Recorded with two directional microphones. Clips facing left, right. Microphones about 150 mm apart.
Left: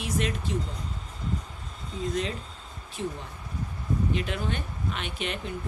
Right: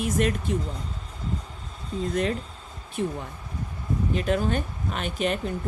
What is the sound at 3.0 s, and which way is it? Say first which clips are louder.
Speech: right 5 dB; 55° right (ahead or behind).